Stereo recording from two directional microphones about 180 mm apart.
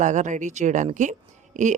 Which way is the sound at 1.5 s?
40° right (ahead or behind).